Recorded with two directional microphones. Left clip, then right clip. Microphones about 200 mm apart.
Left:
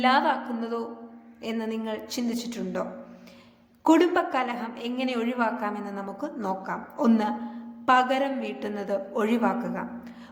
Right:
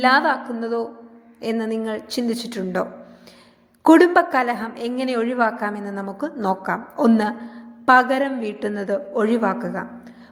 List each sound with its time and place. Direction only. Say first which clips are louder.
0.0 s a woman's voice: right 5 dB; 25° right (ahead or behind)
3.8 s a woman's voice: right 8 dB; 30° right (ahead or behind)